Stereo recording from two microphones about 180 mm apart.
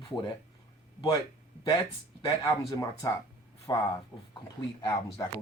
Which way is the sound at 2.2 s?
15° left (ahead or behind).